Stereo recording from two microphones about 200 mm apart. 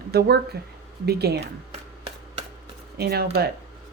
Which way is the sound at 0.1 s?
55° right (ahead or behind).